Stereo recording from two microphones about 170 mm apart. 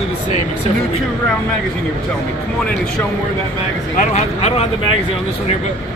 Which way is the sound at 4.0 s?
40° left (ahead or behind).